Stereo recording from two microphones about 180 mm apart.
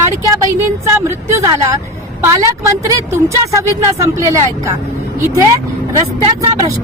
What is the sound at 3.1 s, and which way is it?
Speech, 15° right (ahead or behind).